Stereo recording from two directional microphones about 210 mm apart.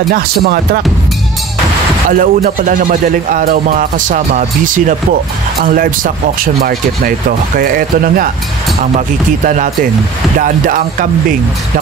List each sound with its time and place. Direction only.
0.1 s speech: 45° right (ahead or behind)
2.0 s speech: 40° right (ahead or behind)
9.4 s speech: 35° right (ahead or behind)